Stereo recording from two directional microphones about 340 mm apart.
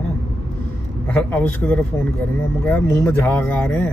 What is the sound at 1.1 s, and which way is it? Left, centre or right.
Speech, centre.